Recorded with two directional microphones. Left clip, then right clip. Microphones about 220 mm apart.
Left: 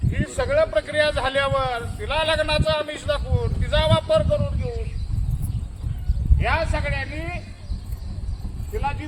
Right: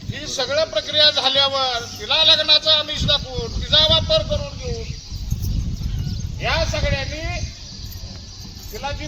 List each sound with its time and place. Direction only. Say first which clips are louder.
0.1 s a man's voice: even; 5° left (ahead or behind)
6.4 s a man's voice: right 2 dB; 25° right (ahead or behind)